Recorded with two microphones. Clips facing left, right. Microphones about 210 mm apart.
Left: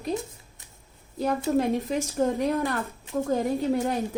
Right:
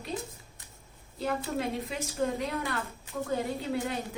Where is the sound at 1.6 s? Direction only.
45° left (ahead or behind).